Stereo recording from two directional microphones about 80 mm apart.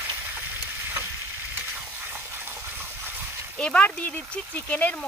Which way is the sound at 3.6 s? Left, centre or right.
Centre.